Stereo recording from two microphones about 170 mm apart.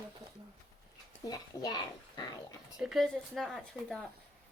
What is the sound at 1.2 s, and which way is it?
Speech, 20° left (ahead or behind).